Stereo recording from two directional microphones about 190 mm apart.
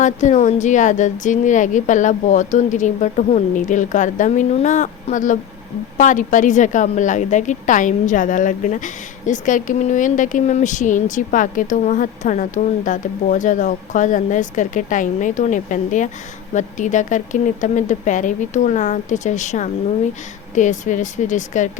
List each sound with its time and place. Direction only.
0.0 s a woman's voice: 40° left (ahead or behind)